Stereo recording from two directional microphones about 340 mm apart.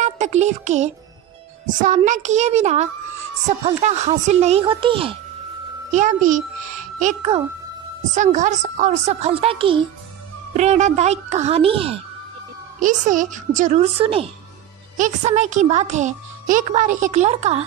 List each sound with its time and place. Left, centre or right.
0.0 s a child's voice: centre